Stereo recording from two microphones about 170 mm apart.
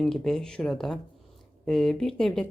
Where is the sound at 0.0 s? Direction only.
Centre (ahead or behind).